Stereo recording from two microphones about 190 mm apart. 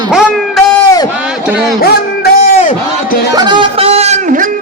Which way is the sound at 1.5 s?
5° right (ahead or behind).